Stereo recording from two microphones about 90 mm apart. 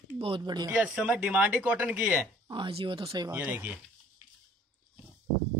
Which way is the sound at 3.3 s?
20° right (ahead or behind).